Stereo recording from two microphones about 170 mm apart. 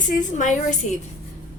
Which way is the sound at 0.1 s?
50° left (ahead or behind).